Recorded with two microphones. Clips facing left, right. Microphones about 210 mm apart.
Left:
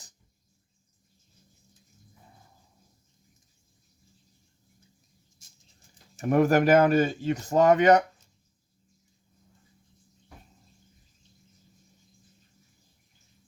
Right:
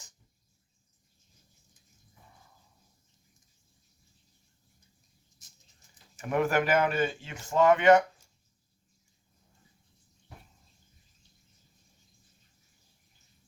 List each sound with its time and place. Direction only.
6.1 s speech: 40° left (ahead or behind)